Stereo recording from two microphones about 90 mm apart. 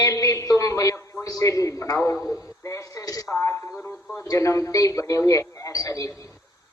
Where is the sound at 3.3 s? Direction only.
30° left (ahead or behind).